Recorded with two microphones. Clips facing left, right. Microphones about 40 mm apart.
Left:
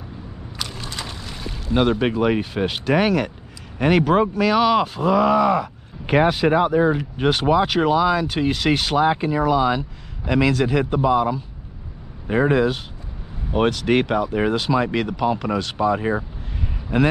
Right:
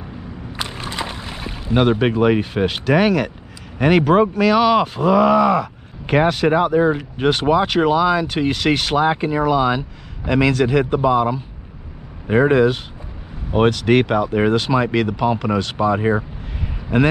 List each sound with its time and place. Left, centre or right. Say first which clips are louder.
0.6 s a sound: right 5 dB; right; by 2.8 s centre
2.9 s speech: right 2 dB; centre
5.6 s speech: right 2 dB; centre